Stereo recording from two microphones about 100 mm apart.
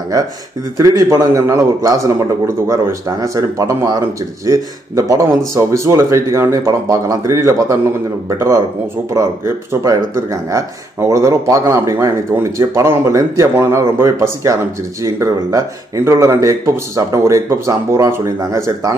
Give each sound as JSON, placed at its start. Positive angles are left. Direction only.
{"t": 0.7, "sound": "speech", "side_deg": -35}
{"t": 9.1, "sound": "speech", "side_deg": -30}